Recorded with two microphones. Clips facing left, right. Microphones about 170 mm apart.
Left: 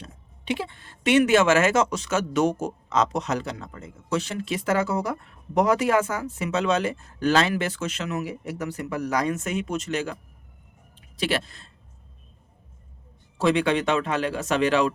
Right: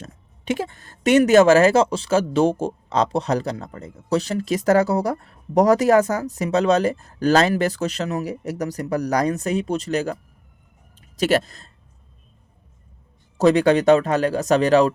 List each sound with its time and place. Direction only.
0.0 s a woman's voice: 45° right (ahead or behind)
11.2 s a woman's voice: 40° right (ahead or behind)
13.4 s a woman's voice: 40° right (ahead or behind)